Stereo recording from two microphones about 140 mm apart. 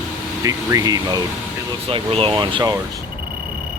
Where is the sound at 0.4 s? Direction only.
25° right (ahead or behind).